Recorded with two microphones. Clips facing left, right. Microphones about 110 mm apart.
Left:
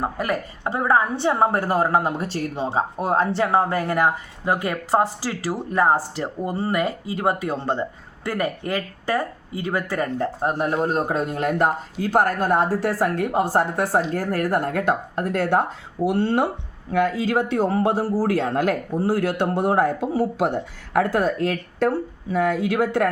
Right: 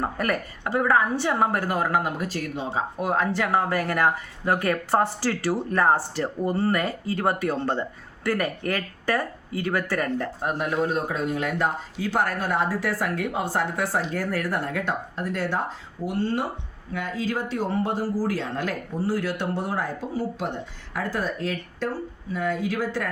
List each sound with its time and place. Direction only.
0.0 s a woman's voice: 20° left (ahead or behind)
10.6 s a man's voice: 40° left (ahead or behind); by 23.0 s 60° left (ahead or behind)